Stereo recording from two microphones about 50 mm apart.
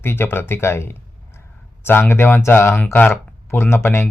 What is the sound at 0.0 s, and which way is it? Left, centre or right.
Speech, left.